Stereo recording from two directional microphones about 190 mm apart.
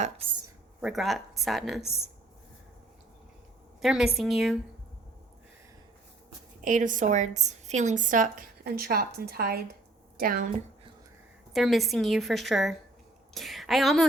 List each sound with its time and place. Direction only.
0.8 s a woman's voice: centre (ahead or behind)
3.8 s a woman's voice: centre (ahead or behind)
6.7 s a woman's voice: 45° right (ahead or behind)
11.5 s a woman's voice: centre (ahead or behind)